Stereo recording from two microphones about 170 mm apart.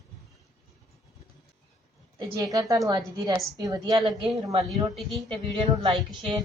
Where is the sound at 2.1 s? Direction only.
25° right (ahead or behind).